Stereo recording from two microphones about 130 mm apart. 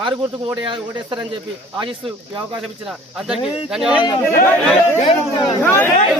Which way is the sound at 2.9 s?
5° right (ahead or behind).